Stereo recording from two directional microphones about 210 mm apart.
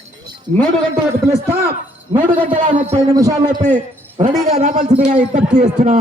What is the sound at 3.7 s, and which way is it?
A man's voice, 30° right (ahead or behind).